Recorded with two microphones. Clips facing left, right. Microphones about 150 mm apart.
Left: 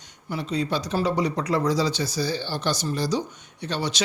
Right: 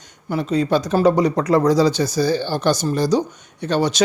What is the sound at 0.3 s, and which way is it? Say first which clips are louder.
Speech: right 8 dB; 50° right (ahead or behind).